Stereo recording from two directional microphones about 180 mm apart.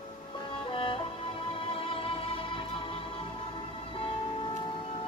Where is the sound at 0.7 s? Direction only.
30° left (ahead or behind).